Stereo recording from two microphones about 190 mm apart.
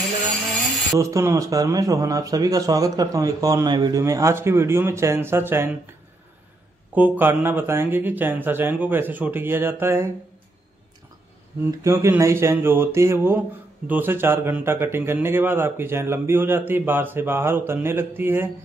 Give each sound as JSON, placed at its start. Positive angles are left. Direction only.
{"t": 0.9, "sound": "a man's voice", "side_deg": -15}
{"t": 7.0, "sound": "a man's voice", "side_deg": -10}
{"t": 11.8, "sound": "a man's voice", "side_deg": -15}